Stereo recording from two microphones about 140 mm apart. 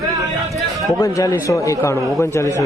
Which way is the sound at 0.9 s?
25° left (ahead or behind).